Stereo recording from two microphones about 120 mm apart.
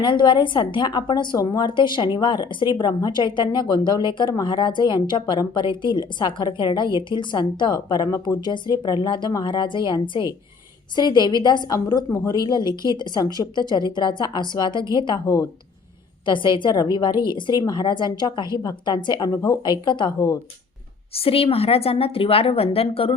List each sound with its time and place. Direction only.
0.0 s a woman's voice: 40° left (ahead or behind)
16.2 s a woman's voice: 40° left (ahead or behind)
19.6 s a woman's voice: 40° left (ahead or behind)
21.2 s a woman's voice: 55° left (ahead or behind)